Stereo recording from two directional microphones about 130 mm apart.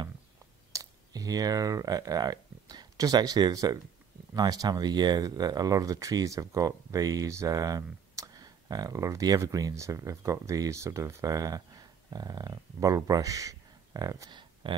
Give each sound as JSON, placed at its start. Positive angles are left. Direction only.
{"t": 0.7, "sound": "speech", "side_deg": -30}